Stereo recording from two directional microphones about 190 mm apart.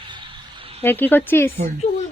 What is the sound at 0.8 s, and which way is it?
Speech, 10° left (ahead or behind).